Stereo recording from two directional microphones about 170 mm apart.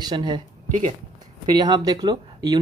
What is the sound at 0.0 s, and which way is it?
Speech, 25° right (ahead or behind).